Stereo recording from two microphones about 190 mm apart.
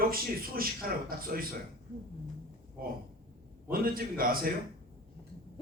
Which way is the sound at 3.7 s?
50° right (ahead or behind).